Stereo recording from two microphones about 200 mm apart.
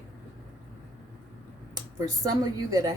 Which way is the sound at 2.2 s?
20° right (ahead or behind).